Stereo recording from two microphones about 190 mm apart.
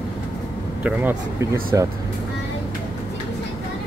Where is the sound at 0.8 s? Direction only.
10° right (ahead or behind).